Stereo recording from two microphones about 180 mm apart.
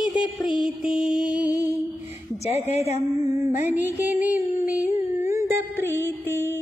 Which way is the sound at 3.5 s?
10° right (ahead or behind).